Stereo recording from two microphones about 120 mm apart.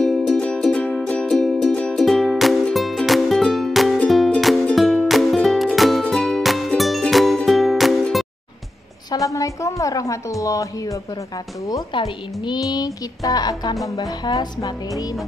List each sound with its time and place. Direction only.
0.0 s music: 5° left (ahead or behind)
9.1 s a woman's voice: 30° left (ahead or behind)
11.9 s a woman's voice: 40° left (ahead or behind)